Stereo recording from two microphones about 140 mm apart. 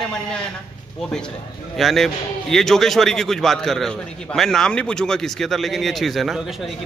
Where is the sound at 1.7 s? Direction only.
Centre (ahead or behind).